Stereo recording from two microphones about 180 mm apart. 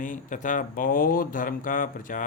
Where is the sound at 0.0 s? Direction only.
45° left (ahead or behind).